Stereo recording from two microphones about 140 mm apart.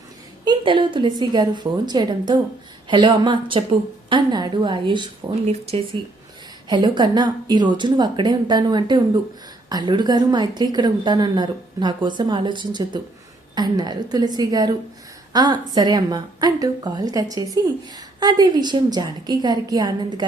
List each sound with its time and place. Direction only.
0.4 s a woman's voice: 35° right (ahead or behind)
5.5 s speech: 45° right (ahead or behind)
6.7 s a woman's voice: 35° right (ahead or behind)